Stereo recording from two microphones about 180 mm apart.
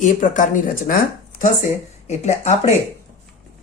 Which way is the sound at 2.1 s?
40° left (ahead or behind).